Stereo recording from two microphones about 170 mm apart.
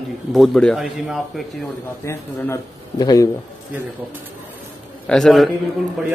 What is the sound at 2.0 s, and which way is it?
Speech, 15° left (ahead or behind).